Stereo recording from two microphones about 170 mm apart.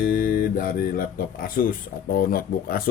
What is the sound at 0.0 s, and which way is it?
Speech, 55° left (ahead or behind).